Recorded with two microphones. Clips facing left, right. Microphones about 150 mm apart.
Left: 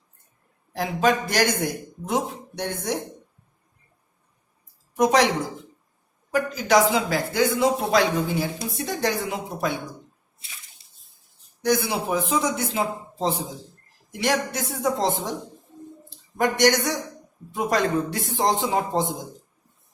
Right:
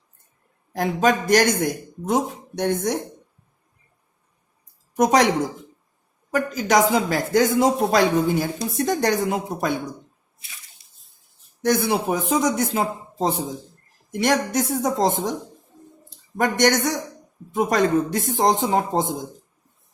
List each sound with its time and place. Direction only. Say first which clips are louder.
0.8 s speech: right 2 dB; 45° right (ahead or behind)
4.9 s speech: right 2 dB; 50° right (ahead or behind)
6.3 s speech: right 1 dB; 45° right (ahead or behind)
11.6 s speech: right 3 dB; 50° right (ahead or behind)
16.4 s speech: right 1 dB; 45° right (ahead or behind)